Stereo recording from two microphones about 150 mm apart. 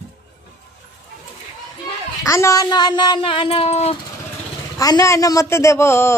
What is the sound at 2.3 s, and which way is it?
Speech, 20° left (ahead or behind).